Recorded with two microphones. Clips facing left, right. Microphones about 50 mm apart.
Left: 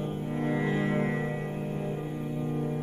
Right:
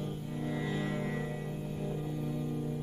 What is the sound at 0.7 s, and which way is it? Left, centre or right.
Music, left.